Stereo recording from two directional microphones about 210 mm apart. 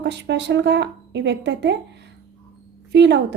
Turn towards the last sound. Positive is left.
turn(degrees=-55)  # may be behind; listen again after turning